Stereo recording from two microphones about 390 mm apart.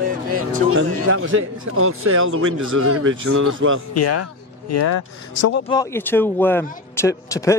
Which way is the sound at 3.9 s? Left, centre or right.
Left.